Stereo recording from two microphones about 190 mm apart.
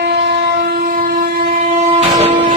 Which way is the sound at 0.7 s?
50° right (ahead or behind).